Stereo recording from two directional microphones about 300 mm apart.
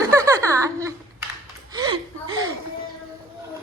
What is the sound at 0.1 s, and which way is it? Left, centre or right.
Giggle, centre.